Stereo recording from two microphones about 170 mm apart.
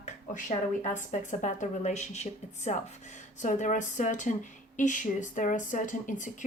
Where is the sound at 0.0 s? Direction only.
50° left (ahead or behind).